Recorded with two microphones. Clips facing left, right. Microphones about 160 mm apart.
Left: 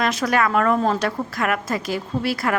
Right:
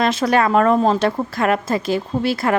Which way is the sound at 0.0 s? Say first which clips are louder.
Right 4 dB; 25° right (ahead or behind).